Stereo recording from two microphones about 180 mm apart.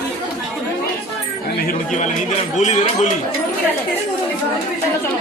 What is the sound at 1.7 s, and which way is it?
Speech, 45° left (ahead or behind).